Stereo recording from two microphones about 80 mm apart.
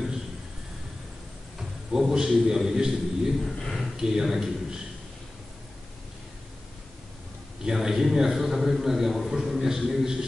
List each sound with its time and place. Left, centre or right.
1.6 s a man's voice: centre
7.6 s a man's voice: centre